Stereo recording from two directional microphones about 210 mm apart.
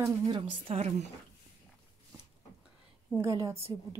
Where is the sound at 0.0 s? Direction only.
20° right (ahead or behind).